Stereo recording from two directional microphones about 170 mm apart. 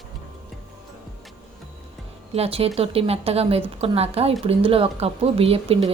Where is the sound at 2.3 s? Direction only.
35° right (ahead or behind).